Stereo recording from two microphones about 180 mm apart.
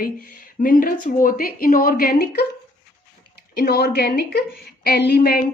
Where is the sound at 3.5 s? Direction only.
65° left (ahead or behind).